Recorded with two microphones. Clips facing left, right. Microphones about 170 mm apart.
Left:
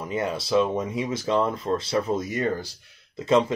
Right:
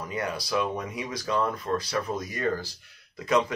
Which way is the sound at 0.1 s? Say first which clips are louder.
Left 6 dB; 25° left (ahead or behind).